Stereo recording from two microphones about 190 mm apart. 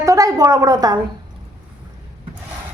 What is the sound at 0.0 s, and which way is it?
Speech, 15° right (ahead or behind).